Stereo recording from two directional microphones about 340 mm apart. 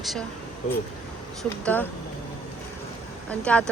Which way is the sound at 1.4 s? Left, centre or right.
Centre.